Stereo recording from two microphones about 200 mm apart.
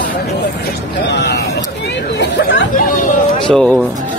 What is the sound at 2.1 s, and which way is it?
Chatter, 60° left (ahead or behind).